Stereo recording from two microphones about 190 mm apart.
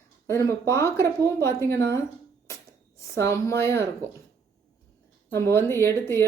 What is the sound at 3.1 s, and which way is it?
Speech, 15° left (ahead or behind).